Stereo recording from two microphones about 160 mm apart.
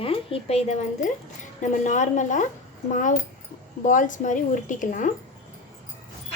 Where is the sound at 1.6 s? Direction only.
50° left (ahead or behind).